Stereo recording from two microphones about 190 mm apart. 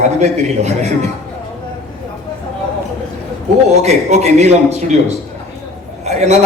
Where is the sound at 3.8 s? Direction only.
35° right (ahead or behind).